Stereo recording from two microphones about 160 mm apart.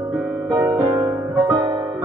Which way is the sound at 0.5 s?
20° right (ahead or behind).